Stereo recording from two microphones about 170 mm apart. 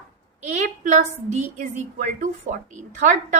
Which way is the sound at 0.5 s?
45° right (ahead or behind).